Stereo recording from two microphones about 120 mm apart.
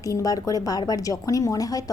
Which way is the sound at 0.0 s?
30° left (ahead or behind).